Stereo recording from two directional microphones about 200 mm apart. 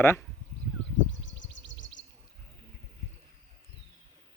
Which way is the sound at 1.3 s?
65° left (ahead or behind).